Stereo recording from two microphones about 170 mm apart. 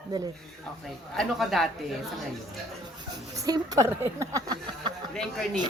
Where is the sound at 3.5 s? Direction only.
20° right (ahead or behind).